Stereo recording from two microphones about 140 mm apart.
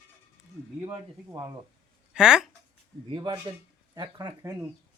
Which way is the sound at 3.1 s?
30° right (ahead or behind).